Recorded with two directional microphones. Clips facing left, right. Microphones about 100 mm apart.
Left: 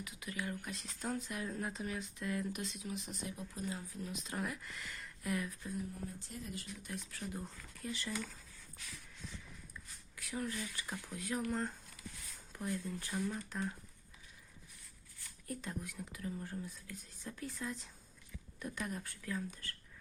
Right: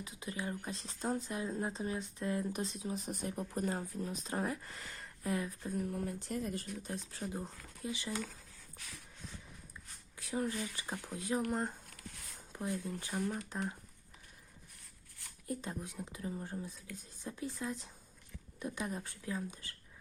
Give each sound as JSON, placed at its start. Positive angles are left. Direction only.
{"t": 0.0, "sound": "speech", "side_deg": -30}
{"t": 3.9, "sound": "speech", "side_deg": -35}
{"t": 5.9, "sound": "speech", "side_deg": -70}
{"t": 6.9, "sound": "speech", "side_deg": -30}
{"t": 10.2, "sound": "speech", "side_deg": -25}
{"t": 12.5, "sound": "speech", "side_deg": -20}
{"t": 15.4, "sound": "speech", "side_deg": -25}